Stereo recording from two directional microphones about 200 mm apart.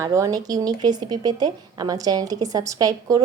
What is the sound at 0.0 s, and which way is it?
Speech, 15° right (ahead or behind).